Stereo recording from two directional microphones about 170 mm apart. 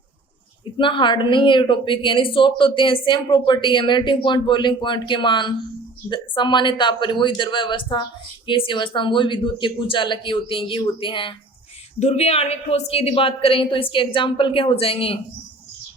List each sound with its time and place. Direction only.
0.6 s a woman's voice: 30° left (ahead or behind)